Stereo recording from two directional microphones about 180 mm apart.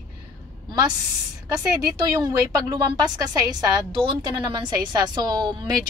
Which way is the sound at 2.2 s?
20° right (ahead or behind).